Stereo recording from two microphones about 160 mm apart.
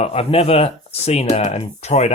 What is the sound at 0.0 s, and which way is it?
Speech, 40° left (ahead or behind).